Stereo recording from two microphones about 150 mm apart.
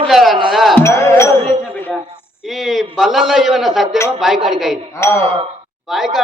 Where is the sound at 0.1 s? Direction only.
Centre (ahead or behind).